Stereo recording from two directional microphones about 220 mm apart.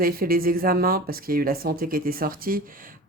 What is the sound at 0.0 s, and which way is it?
Speech, 40° right (ahead or behind).